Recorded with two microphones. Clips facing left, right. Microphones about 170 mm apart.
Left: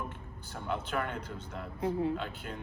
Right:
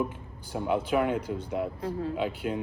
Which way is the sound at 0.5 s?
10° right (ahead or behind).